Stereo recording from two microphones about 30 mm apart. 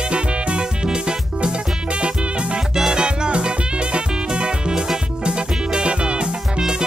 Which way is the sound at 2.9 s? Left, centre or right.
Right.